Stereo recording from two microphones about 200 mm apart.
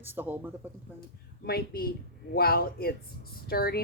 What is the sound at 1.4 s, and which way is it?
Speech, 50° left (ahead or behind).